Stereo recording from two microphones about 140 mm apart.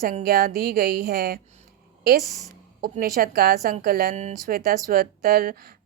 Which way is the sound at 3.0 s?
90° right.